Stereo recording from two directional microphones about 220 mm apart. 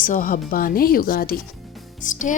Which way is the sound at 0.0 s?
40° left (ahead or behind).